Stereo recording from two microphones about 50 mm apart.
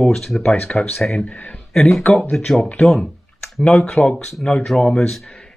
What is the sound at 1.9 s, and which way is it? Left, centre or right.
Speech, centre.